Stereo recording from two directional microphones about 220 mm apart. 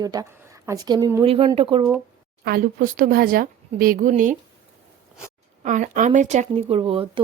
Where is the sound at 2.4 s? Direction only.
40° right (ahead or behind).